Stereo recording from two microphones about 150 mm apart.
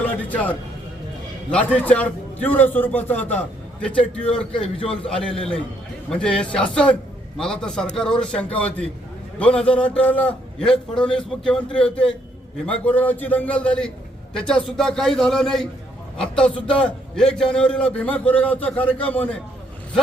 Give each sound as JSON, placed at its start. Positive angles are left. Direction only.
{"t": 0.0, "sound": "music", "side_deg": 10}
{"t": 1.5, "sound": "a man's voice", "side_deg": 10}